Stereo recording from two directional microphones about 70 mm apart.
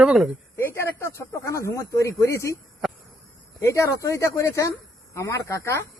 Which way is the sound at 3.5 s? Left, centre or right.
Left.